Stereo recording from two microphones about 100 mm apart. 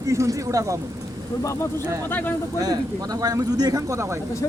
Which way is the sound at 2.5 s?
40° right (ahead or behind).